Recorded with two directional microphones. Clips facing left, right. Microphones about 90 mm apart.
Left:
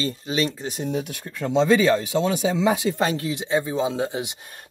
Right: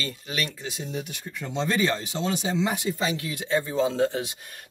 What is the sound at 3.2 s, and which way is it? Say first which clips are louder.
Speech: left 3 dB; 25° left (ahead or behind).